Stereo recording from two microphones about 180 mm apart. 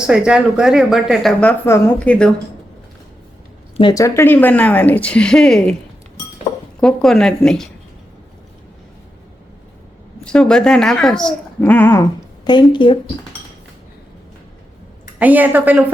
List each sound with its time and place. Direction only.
0.1 s a woman's voice: 5° right (ahead or behind)
3.8 s speech: 20° left (ahead or behind); by 5.7 s 5° left (ahead or behind)
6.7 s a woman's voice: 5° left (ahead or behind)
10.2 s a woman's voice: 5° left (ahead or behind)
12.5 s a woman's voice: 25° left (ahead or behind)
15.2 s a woman's voice: 10° right (ahead or behind)